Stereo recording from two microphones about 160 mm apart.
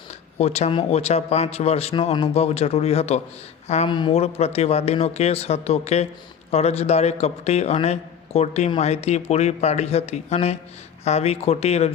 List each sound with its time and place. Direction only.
0.3 s a man's voice: 40° left (ahead or behind)
3.8 s a man's voice: 30° left (ahead or behind)